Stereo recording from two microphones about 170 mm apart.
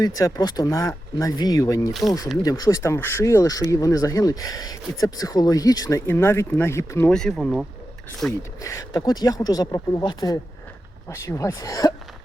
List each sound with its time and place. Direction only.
0.0 s speech: 20° left (ahead or behind)
1.9 s speech: centre (ahead or behind)
2.4 s speech: 20° left (ahead or behind)
7.1 s speech: 5° left (ahead or behind)
8.3 s speech: 15° left (ahead or behind)